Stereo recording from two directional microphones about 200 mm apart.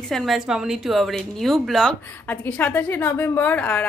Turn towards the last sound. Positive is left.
turn(degrees=5)  # may be behind; listen again after turning